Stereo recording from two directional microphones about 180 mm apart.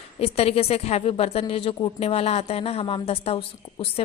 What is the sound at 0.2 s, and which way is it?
A woman's voice, 35° left (ahead or behind).